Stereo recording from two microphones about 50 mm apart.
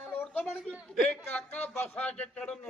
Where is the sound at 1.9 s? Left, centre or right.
Left.